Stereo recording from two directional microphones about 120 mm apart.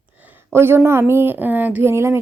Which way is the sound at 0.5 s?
20° right (ahead or behind).